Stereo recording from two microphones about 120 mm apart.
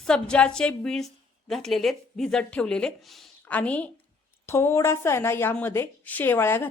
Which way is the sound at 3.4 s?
10° left (ahead or behind).